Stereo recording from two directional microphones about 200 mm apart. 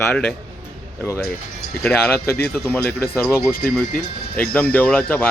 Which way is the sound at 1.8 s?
10° left (ahead or behind).